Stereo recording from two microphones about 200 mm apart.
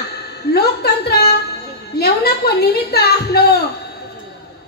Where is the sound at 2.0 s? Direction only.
50° left (ahead or behind).